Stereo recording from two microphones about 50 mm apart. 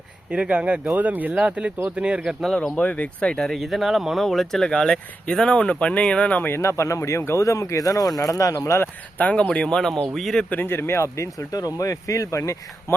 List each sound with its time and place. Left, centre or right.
0.3 s speech: right
1.4 s speech: right
2.7 s speech: left
3.2 s speech: centre
3.6 s speech: centre; by 6.4 s left
6.6 s speech: left
9.1 s speech: left; by 10.4 s centre
10.5 s speech: left